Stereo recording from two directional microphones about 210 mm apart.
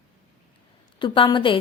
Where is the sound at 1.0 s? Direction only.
25° left (ahead or behind).